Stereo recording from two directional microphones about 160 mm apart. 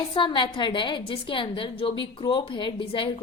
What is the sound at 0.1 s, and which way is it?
A woman's voice, 30° left (ahead or behind).